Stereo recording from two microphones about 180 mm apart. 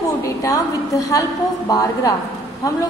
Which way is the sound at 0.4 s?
20° left (ahead or behind).